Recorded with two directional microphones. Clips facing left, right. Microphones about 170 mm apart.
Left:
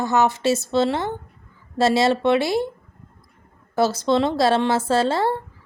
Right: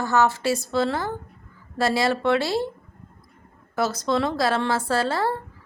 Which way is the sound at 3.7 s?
30° left (ahead or behind).